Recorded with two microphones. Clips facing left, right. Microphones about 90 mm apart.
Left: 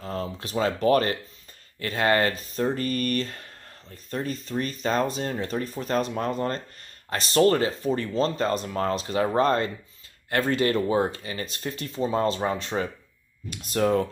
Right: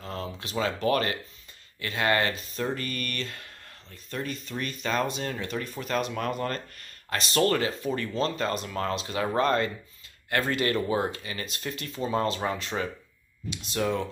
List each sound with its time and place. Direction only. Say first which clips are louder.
0.0 s speech: left 4 dB; 35° left (ahead or behind)